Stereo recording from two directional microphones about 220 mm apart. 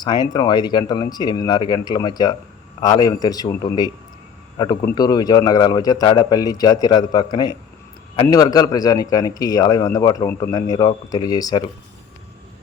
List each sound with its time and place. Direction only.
0.0 s a man's voice: 20° left (ahead or behind)